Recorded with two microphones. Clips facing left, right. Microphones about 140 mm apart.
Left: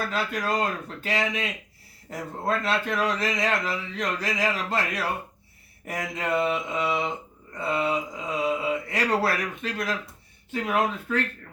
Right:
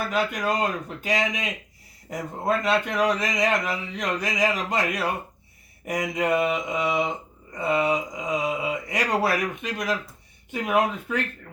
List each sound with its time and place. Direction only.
0.1 s speech: 15° right (ahead or behind)